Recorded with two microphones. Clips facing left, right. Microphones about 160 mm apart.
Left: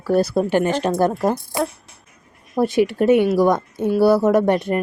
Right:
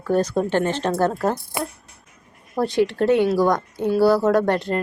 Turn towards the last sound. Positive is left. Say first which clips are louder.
# left 2 dB
turn(degrees=20)  # may be behind; listen again after turning